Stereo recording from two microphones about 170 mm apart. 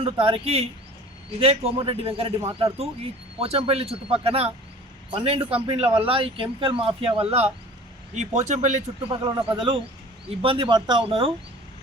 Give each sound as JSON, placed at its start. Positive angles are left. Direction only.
{"t": 0.0, "sound": "a man's voice", "side_deg": -35}
{"t": 9.0, "sound": "speech", "side_deg": -25}